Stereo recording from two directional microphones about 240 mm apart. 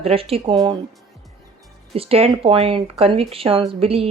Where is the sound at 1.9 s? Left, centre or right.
Right.